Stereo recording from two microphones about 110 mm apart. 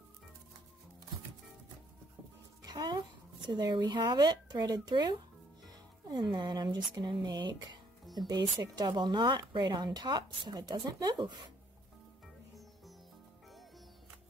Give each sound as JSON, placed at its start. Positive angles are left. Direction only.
{"t": 2.6, "sound": "music", "side_deg": -40}
{"t": 3.4, "sound": "speech", "side_deg": -45}